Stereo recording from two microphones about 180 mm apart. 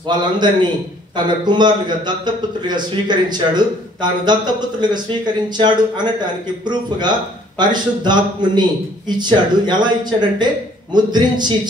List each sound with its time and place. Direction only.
0.1 s a man's voice: 25° right (ahead or behind)